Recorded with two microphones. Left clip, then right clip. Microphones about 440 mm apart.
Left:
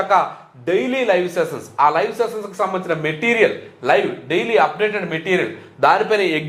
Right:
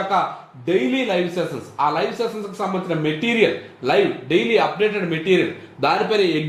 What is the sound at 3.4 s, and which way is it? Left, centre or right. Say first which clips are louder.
A man's voice: left 2 dB; left.